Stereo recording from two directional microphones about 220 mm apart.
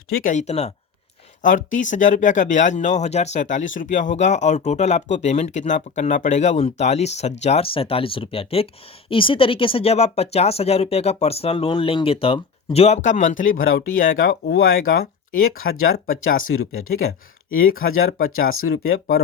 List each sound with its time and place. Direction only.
0.2 s speech: 35° left (ahead or behind)